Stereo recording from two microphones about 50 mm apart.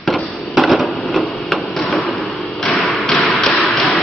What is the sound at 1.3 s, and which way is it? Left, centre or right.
Hammer, centre.